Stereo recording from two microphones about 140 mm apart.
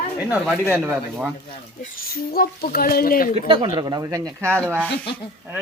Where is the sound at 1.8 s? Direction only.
90° left.